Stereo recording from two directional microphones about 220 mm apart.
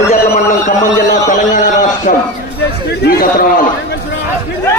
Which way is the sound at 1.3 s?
35° left (ahead or behind).